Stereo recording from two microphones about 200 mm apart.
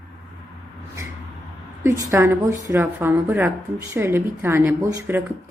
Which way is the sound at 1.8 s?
15° right (ahead or behind).